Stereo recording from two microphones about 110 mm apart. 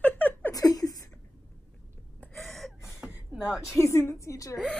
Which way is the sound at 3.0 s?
5° right (ahead or behind).